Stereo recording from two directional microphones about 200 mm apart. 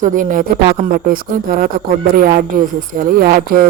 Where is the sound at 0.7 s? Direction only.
40° right (ahead or behind).